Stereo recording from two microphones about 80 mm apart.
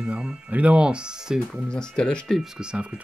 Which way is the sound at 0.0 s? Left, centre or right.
Centre.